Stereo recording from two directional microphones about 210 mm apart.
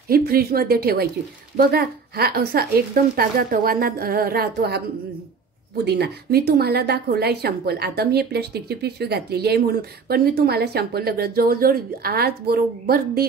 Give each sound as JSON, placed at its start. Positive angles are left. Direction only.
{"t": 0.1, "sound": "a woman's voice", "side_deg": -45}
{"t": 5.9, "sound": "a woman's voice", "side_deg": -50}